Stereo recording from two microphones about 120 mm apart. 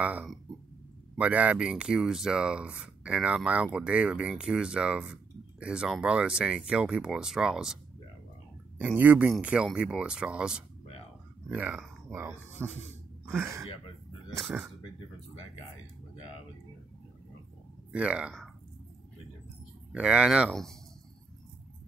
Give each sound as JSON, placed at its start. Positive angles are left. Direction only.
{"t": 0.0, "sound": "speech", "side_deg": -15}
{"t": 12.6, "sound": "speech", "side_deg": 10}
{"t": 13.2, "sound": "speech", "side_deg": -20}
{"t": 14.4, "sound": "speech", "side_deg": -5}
{"t": 17.9, "sound": "speech", "side_deg": -10}
{"t": 19.9, "sound": "speech", "side_deg": -10}
{"t": 20.4, "sound": "speech", "side_deg": 5}